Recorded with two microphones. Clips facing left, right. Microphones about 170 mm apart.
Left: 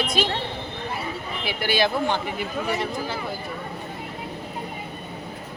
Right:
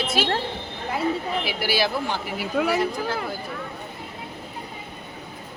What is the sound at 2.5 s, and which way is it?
Speech, 70° right (ahead or behind).